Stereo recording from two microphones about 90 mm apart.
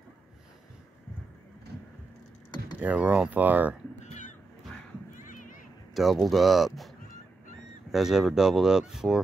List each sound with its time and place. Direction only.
2.8 s speech: 15° right (ahead or behind)
5.9 s speech: centre (ahead or behind)
7.9 s speech: 5° right (ahead or behind)